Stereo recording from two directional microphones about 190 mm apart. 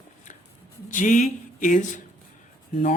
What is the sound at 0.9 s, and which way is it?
A man's voice, 45° left (ahead or behind).